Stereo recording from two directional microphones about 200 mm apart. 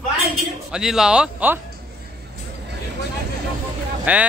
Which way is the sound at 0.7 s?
5° right (ahead or behind).